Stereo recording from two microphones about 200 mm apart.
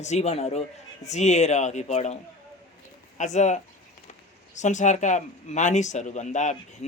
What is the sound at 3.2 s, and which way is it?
Speech, 35° left (ahead or behind).